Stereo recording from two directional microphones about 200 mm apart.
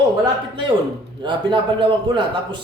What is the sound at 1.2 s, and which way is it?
A man's voice, 25° right (ahead or behind).